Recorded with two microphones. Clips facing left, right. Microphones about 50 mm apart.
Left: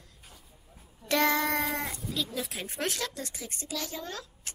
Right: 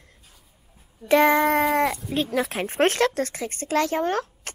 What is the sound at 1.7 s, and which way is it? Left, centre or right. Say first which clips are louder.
Speech: right 11 dB; right.